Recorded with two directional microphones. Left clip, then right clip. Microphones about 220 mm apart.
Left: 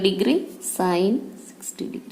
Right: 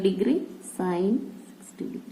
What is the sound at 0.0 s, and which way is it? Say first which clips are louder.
A woman's voice: left 4 dB; 30° left (ahead or behind).